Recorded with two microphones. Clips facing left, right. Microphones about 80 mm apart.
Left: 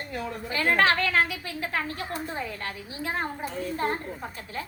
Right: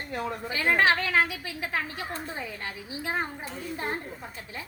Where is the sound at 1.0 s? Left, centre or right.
Centre.